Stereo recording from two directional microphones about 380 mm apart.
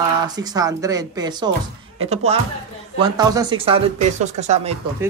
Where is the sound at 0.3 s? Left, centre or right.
Centre.